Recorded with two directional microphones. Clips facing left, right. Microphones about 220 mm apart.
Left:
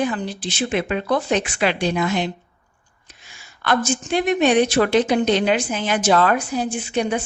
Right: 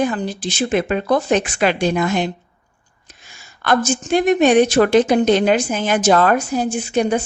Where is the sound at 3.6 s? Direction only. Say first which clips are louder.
Right 3 dB; 45° right (ahead or behind).